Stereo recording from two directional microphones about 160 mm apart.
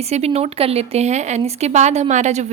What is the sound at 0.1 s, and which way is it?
Speech, 40° right (ahead or behind).